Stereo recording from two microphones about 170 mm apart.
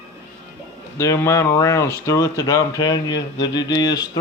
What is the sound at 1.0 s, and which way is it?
Speech, 20° left (ahead or behind).